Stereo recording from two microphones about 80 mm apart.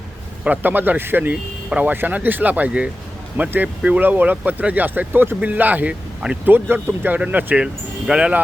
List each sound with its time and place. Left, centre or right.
0.4 s speech: right
7.6 s speech: centre